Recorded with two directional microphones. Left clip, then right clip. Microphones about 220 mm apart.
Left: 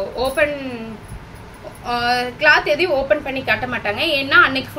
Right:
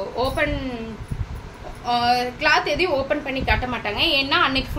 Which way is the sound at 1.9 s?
5° right (ahead or behind).